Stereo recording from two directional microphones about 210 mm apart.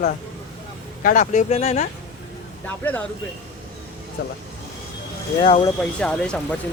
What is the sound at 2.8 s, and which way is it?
Speech, 10° left (ahead or behind).